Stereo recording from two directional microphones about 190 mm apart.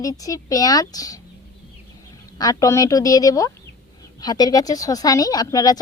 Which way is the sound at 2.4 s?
20° left (ahead or behind).